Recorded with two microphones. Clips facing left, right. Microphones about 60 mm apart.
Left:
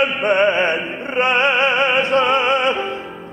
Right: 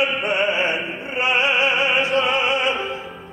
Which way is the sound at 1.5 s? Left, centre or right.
Left.